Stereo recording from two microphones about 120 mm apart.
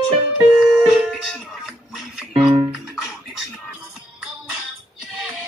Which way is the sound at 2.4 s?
40° right (ahead or behind).